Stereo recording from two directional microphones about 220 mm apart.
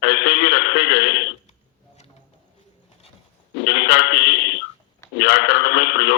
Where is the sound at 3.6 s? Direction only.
50° left (ahead or behind).